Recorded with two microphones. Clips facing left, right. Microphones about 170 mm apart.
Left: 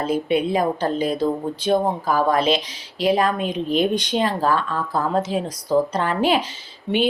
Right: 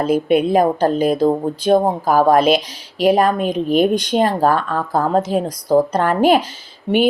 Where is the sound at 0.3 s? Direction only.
55° right (ahead or behind).